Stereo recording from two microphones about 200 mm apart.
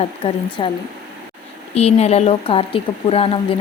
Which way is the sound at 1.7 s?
30° left (ahead or behind).